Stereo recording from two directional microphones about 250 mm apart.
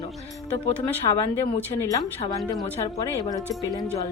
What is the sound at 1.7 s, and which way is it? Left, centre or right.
Speech, centre.